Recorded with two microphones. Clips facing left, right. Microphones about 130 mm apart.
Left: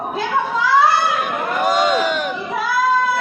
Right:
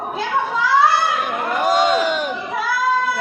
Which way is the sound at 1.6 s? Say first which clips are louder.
Even; 25° right (ahead or behind).